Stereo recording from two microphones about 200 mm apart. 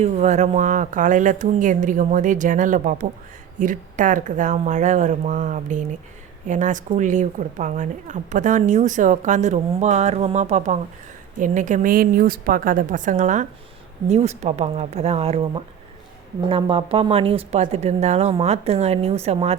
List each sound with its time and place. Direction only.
0.0 s a woman's voice: 35° right (ahead or behind)